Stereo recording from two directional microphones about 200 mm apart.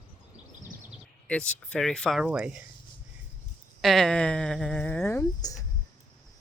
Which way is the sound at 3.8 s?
Centre (ahead or behind).